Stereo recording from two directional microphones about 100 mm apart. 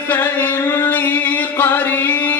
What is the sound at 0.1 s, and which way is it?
Music, 20° left (ahead or behind).